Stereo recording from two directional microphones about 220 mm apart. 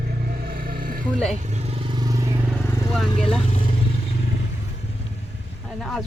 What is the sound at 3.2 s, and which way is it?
Speech, 5° left (ahead or behind).